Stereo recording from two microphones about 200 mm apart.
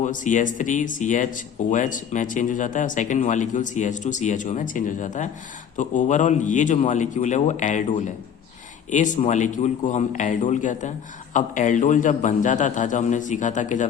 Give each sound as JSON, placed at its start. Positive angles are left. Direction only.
{"t": 0.0, "sound": "speech", "side_deg": 40}
{"t": 8.9, "sound": "speech", "side_deg": 40}